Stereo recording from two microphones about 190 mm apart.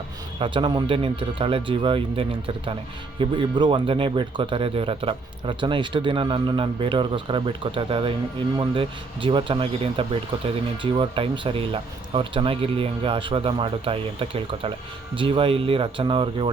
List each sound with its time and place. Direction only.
0.3 s speech: 25° right (ahead or behind)